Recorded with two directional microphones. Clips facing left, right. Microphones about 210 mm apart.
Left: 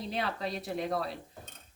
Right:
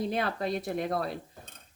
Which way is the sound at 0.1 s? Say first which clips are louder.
Right 4 dB; 50° right (ahead or behind).